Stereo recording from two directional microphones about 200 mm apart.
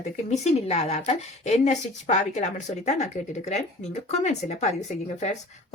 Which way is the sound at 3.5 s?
35° left (ahead or behind).